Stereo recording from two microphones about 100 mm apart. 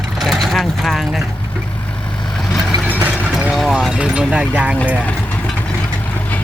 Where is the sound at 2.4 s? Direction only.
Centre (ahead or behind).